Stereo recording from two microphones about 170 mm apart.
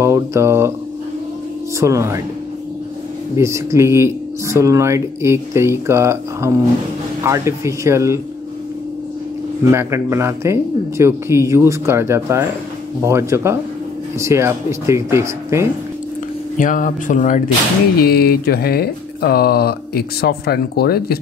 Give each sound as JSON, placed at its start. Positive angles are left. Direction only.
{"t": 0.0, "sound": "mantra", "side_deg": -15}
{"t": 1.8, "sound": "speech", "side_deg": -15}
{"t": 3.3, "sound": "speech", "side_deg": -15}
{"t": 9.7, "sound": "speech", "side_deg": -15}
{"t": 16.5, "sound": "speech", "side_deg": 55}
{"t": 17.9, "sound": "speech", "side_deg": 65}